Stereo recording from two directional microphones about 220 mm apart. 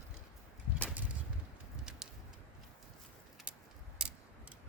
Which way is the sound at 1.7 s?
5° right (ahead or behind).